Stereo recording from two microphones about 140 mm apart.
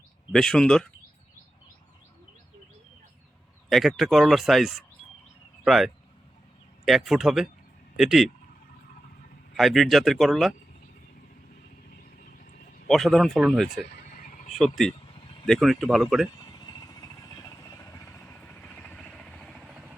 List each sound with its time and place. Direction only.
0.3 s speech: 5° left (ahead or behind)
3.7 s speech: centre (ahead or behind)
9.6 s speech: centre (ahead or behind)
12.9 s speech: centre (ahead or behind)
13.7 s a sound: 90° left; by 14.5 s 65° left (ahead or behind)
14.5 s speech: centre (ahead or behind)
16.4 s vehicle: 30° left (ahead or behind)
18.2 s vehicle: 10° left (ahead or behind)